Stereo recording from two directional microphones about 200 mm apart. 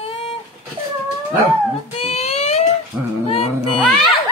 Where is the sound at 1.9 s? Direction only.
30° left (ahead or behind).